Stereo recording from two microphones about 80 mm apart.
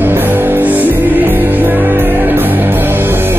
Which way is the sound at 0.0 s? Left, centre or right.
Right.